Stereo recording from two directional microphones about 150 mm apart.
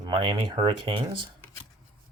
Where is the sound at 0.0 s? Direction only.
35° right (ahead or behind).